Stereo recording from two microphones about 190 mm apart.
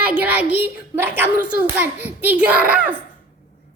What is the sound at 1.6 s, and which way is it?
A child's voice, 10° right (ahead or behind).